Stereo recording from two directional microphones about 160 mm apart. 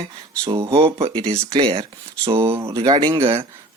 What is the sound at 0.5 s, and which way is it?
Speech, 20° right (ahead or behind).